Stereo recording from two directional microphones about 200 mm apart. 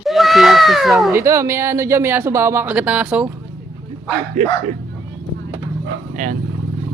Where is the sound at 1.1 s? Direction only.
15° right (ahead or behind).